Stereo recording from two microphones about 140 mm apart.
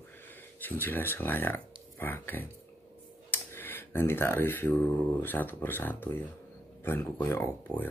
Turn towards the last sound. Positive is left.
turn(degrees=15)  # may be behind; listen again after turning